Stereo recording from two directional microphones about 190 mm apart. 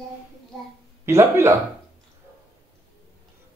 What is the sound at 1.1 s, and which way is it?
Speech, 15° right (ahead or behind).